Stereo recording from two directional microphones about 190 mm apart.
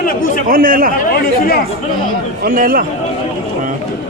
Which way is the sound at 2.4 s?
50° right (ahead or behind).